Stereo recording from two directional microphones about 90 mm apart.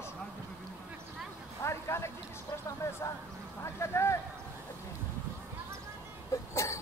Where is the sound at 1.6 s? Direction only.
30° left (ahead or behind).